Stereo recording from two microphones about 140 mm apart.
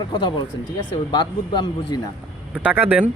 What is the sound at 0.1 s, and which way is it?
A man's voice, 35° left (ahead or behind).